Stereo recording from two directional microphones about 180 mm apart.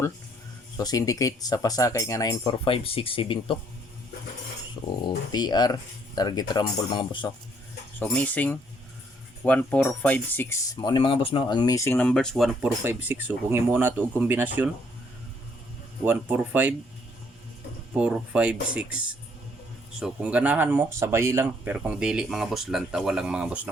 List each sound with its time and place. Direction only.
0.8 s speech: 20° left (ahead or behind)
5.3 s speech: 25° left (ahead or behind)
7.9 s speech: 10° left (ahead or behind)
10.8 s speech: 25° left (ahead or behind); by 12.7 s centre (ahead or behind)
12.8 s speech: 10° right (ahead or behind)
16.0 s speech: 10° right (ahead or behind)
17.9 s speech: 5° right (ahead or behind)